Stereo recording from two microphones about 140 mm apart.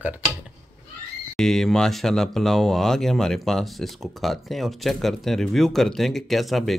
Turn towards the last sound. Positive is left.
turn(degrees=0)  # may be behind; listen again after turning